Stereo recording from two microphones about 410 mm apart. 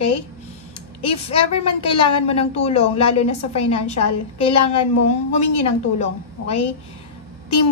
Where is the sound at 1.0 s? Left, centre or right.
Centre.